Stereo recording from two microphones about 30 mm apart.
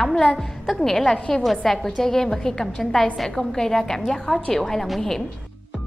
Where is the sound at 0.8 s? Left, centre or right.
Centre.